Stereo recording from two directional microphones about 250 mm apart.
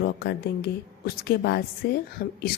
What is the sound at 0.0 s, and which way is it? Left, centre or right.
A woman's voice, left.